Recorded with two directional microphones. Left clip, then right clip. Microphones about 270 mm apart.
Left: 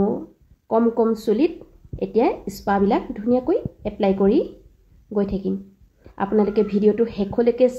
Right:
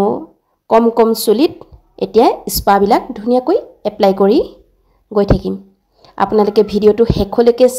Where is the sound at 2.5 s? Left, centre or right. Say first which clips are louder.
Right 10 dB; right.